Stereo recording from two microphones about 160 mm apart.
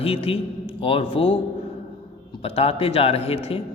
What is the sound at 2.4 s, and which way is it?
Speech, 40° left (ahead or behind).